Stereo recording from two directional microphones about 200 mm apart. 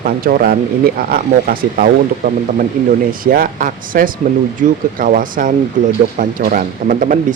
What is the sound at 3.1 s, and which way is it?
Speech, 45° right (ahead or behind).